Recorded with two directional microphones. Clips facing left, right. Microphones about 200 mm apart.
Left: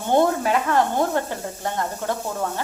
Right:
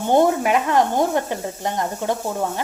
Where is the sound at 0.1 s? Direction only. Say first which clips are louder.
Right 2 dB; 15° right (ahead or behind).